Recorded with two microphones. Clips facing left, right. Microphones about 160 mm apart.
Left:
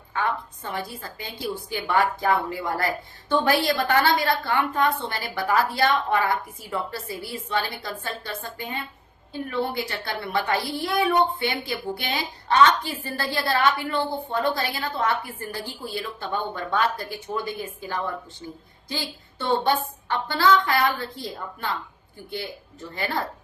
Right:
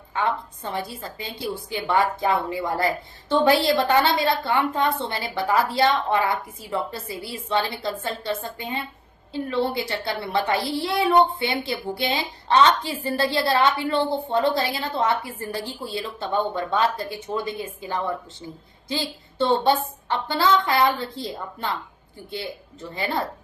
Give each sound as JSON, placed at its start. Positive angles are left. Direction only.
{"t": 0.1, "sound": "a woman's voice", "side_deg": -20}
{"t": 23.0, "sound": "a woman's voice", "side_deg": -25}